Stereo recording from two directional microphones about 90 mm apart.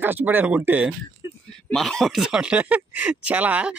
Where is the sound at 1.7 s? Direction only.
5° left (ahead or behind).